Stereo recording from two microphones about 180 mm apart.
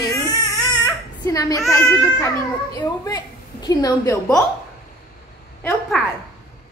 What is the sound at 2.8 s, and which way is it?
A woman's voice, 20° left (ahead or behind).